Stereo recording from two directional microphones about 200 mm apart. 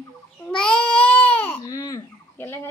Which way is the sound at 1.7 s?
20° left (ahead or behind).